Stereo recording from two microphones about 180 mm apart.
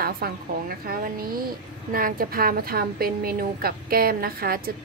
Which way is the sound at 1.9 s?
50° right (ahead or behind).